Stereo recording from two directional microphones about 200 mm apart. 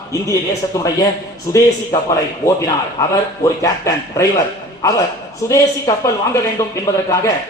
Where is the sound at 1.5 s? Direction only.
15° left (ahead or behind).